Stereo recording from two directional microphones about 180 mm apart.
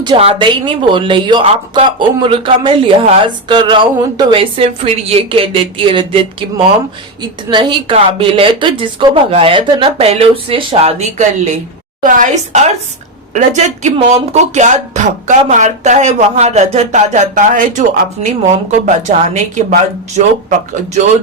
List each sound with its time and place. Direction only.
0.0 s a woman's voice: 30° right (ahead or behind)